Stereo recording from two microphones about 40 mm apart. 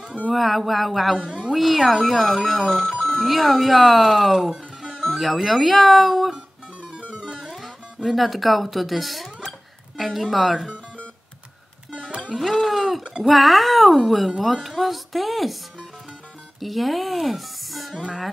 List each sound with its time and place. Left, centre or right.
0.3 s speech: centre
1.1 s speech: right
1.4 s speech: centre
5.1 s speech: centre
6.3 s music: right
7.5 s speech: centre
11.9 s music: right
12.4 s speech: centre
16.5 s speech: centre